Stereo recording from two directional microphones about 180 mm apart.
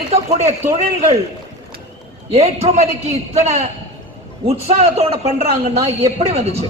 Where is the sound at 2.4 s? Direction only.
35° right (ahead or behind).